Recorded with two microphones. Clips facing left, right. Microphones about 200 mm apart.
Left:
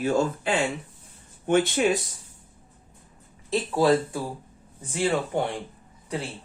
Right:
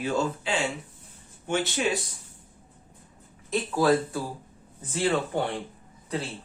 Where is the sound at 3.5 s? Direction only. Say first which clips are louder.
Left 2 dB; 30° left (ahead or behind).